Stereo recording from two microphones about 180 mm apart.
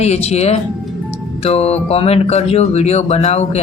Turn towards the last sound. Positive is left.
turn(degrees=35)  # may be behind; listen again after turning